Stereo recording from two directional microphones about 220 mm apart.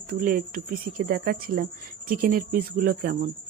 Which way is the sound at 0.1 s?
40° right (ahead or behind).